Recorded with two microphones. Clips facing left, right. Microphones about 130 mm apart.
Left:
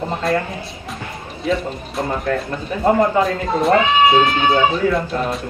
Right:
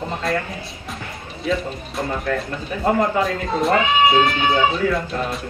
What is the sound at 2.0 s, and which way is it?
Speech, 30° left (ahead or behind).